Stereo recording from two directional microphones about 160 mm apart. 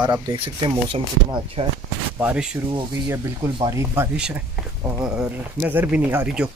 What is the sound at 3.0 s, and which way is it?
Speech, 20° right (ahead or behind).